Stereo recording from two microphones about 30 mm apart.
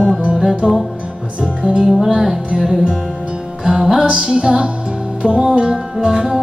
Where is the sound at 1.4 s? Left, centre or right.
Right.